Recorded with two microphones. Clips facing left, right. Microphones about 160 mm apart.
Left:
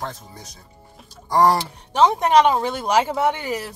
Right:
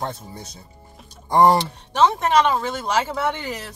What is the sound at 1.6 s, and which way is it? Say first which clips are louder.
Speech: left 1 dB; 15° left (ahead or behind).